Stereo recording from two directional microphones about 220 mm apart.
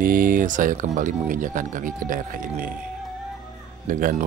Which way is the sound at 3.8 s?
35° right (ahead or behind).